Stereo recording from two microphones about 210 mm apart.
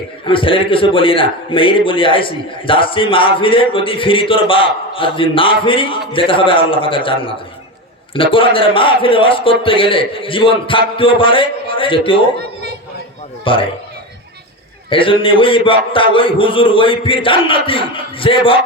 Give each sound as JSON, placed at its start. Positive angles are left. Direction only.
{"t": 0.3, "sound": "a man's voice", "side_deg": 25}
{"t": 13.4, "sound": "a man's voice", "side_deg": 25}
{"t": 14.8, "sound": "a man's voice", "side_deg": 25}